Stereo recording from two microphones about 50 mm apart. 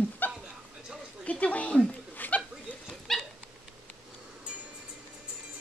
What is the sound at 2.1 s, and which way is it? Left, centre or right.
Chuckle, left.